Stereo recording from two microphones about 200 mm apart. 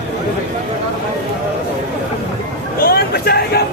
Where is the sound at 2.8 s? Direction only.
50° left (ahead or behind).